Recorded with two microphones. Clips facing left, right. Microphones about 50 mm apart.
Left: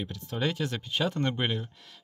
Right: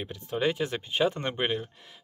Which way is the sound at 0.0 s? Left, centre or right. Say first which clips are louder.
Right 3 dB; centre.